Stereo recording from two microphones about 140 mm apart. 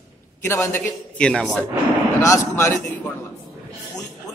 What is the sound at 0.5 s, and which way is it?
A man's voice, 15° left (ahead or behind).